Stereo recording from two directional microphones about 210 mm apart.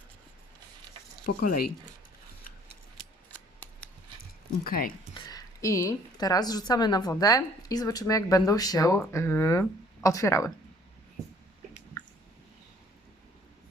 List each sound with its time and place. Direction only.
1.2 s speech: 40° left (ahead or behind)
4.6 s speech: 45° left (ahead or behind)
5.1 s a woman's voice: 15° left (ahead or behind)